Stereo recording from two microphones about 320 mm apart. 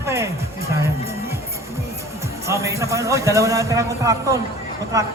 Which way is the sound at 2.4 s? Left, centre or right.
Centre.